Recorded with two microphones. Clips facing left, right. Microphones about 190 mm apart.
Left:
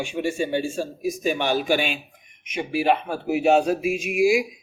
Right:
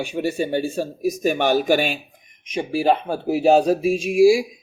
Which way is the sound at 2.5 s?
30° right (ahead or behind).